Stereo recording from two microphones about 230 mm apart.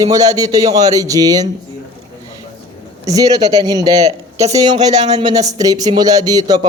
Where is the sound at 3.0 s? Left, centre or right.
Centre.